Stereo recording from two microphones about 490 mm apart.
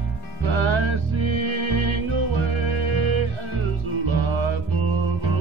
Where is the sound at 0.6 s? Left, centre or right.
Right.